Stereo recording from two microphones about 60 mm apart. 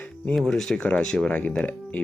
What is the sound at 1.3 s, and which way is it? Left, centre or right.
Speech, left.